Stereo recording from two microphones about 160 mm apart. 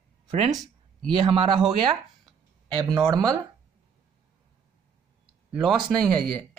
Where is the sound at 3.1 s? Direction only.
25° right (ahead or behind).